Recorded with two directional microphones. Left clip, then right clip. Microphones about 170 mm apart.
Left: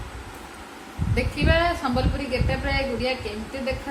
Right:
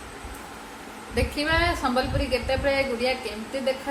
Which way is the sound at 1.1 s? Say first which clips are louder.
Left 1 dB; 15° left (ahead or behind).